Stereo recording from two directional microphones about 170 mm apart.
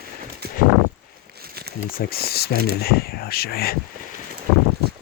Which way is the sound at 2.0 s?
65° left (ahead or behind).